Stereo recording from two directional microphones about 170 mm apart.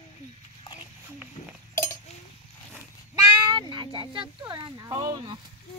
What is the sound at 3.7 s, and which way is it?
Speech, 30° right (ahead or behind).